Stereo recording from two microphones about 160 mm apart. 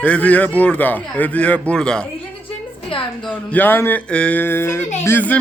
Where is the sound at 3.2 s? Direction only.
10° left (ahead or behind).